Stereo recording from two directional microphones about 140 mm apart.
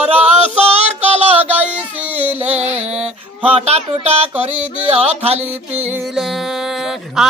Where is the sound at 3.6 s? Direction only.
50° right (ahead or behind).